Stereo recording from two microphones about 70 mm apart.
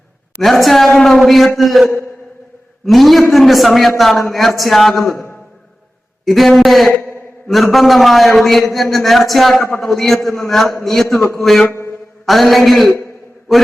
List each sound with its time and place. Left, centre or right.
0.4 s a man's voice: centre
5.0 s a sound: left
6.2 s a man's voice: centre